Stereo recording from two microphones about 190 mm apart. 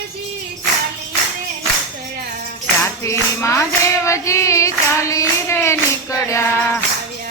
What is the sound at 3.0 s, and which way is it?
Clapping, 15° left (ahead or behind).